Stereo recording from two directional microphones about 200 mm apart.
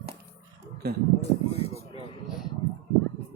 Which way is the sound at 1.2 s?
30° left (ahead or behind).